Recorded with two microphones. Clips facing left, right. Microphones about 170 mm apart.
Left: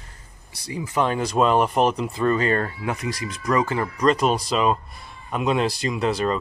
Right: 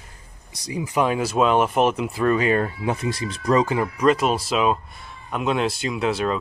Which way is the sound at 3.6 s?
15° right (ahead or behind).